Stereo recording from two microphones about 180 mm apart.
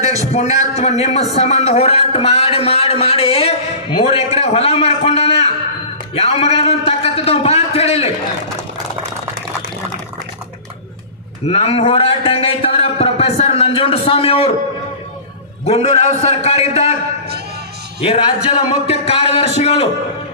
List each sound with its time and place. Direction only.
0.0 s a man's voice: 40° left (ahead or behind)
11.4 s a man's voice: 35° left (ahead or behind)
15.6 s a man's voice: 35° left (ahead or behind)
18.0 s a man's voice: 30° left (ahead or behind)